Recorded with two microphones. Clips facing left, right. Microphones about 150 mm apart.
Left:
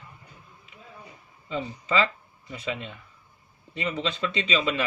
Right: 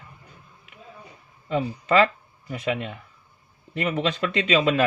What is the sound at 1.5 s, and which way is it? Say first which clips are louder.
Speech: right 6 dB; 60° right (ahead or behind).